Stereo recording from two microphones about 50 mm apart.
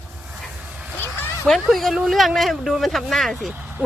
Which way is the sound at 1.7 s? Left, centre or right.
Centre.